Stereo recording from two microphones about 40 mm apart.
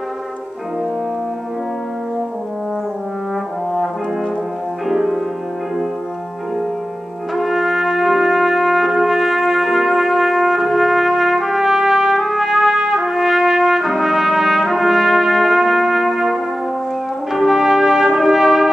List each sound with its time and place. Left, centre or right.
4.9 s music: centre
7.3 s trumpet: centre
17.3 s brass instrument: centre